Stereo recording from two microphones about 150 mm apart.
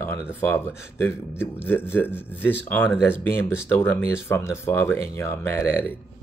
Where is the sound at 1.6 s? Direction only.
15° left (ahead or behind).